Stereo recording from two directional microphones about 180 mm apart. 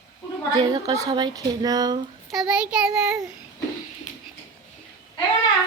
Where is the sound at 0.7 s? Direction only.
20° right (ahead or behind).